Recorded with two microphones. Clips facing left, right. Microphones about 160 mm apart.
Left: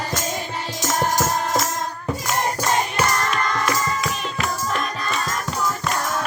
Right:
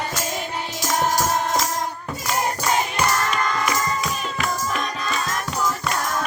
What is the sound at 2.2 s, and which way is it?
Music, 5° left (ahead or behind).